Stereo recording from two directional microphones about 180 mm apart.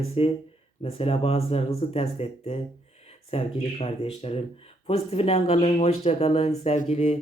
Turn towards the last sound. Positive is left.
turn(degrees=35)  # may be behind; listen again after turning